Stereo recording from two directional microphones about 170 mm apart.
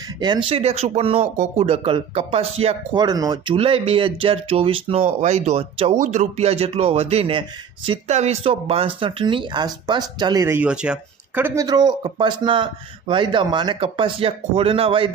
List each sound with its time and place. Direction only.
0.2 s speech: 25° right (ahead or behind)
3.0 s speech: 25° right (ahead or behind)
10.4 s speech: 10° right (ahead or behind)
11.6 s speech: 25° right (ahead or behind)